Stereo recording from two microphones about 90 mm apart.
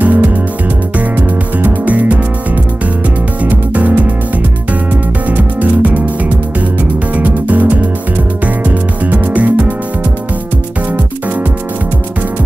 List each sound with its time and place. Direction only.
0.0 s music: 15° right (ahead or behind)
5.3 s music: 15° right (ahead or behind)
9.0 s music: 15° right (ahead or behind)